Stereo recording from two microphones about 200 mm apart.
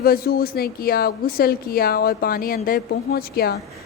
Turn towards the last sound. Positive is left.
turn(degrees=50)  # may be behind; listen again after turning